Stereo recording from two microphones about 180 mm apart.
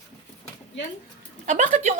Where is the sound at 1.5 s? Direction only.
40° right (ahead or behind).